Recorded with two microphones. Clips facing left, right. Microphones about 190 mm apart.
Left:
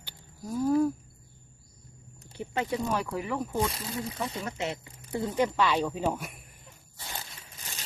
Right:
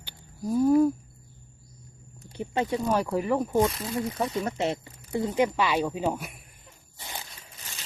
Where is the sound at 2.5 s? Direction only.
35° right (ahead or behind).